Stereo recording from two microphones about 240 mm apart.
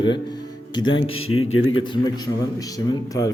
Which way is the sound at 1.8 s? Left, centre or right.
Centre.